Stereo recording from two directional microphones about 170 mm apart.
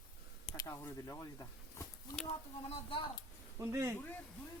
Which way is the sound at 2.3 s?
35° left (ahead or behind).